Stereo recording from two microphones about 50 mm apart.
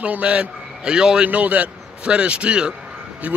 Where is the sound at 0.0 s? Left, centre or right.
Right.